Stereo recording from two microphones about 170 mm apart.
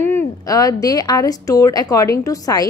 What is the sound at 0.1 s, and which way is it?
A woman's voice, 20° left (ahead or behind).